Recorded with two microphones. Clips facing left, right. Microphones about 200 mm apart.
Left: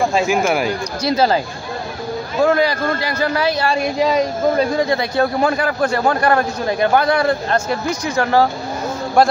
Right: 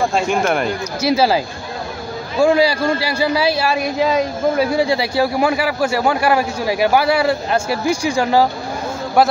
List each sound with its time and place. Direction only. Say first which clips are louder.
0.1 s speech: left 1 dB; 5° left (ahead or behind)
1.0 s a man's voice: right 1 dB; 10° right (ahead or behind)
2.4 s a man's voice: right 2 dB; 10° right (ahead or behind)